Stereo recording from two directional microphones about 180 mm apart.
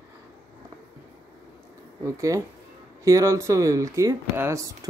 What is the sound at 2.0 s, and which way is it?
Speech, 15° right (ahead or behind).